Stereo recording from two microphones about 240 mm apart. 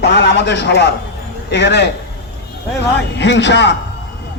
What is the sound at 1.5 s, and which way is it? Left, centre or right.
Speech, left.